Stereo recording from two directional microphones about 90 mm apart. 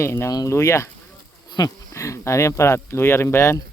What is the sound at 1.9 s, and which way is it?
Speech, 35° left (ahead or behind).